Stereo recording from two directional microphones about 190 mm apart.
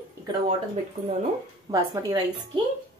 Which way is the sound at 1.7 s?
20° right (ahead or behind).